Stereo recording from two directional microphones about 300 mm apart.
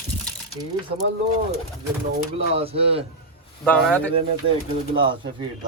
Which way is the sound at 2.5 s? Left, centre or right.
Centre.